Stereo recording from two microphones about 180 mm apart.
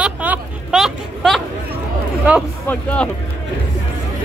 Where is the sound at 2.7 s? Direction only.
10° left (ahead or behind).